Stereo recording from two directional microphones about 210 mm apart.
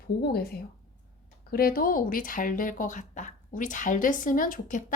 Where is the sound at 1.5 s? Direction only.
45° left (ahead or behind).